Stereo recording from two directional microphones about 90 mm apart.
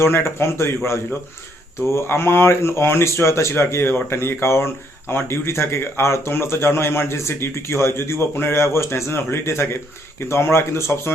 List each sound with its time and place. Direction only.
0.0 s speech: 25° left (ahead or behind)
1.9 s speech: 30° left (ahead or behind)